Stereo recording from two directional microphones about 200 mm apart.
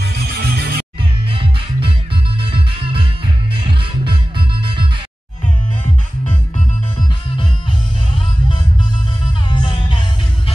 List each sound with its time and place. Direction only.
0.0 s music: 55° right (ahead or behind)
1.3 s music: 25° right (ahead or behind)
9.5 s music: 25° left (ahead or behind)